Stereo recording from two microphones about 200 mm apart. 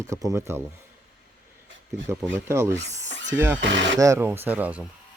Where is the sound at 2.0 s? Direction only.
10° right (ahead or behind).